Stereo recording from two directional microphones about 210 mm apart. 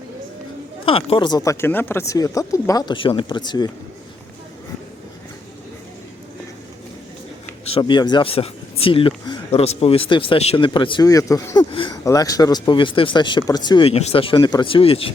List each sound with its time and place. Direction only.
0.9 s speech: 25° left (ahead or behind)
7.6 s speech: 25° left (ahead or behind)